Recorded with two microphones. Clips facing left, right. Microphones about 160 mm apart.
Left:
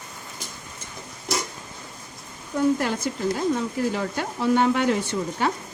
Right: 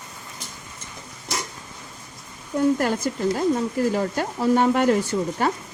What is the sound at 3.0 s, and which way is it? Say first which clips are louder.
Speech: right 1 dB; 45° right (ahead or behind).